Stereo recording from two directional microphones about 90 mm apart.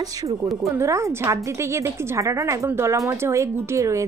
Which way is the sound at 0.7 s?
35° right (ahead or behind).